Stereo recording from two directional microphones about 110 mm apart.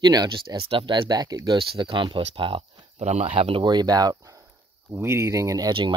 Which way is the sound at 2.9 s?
90° right.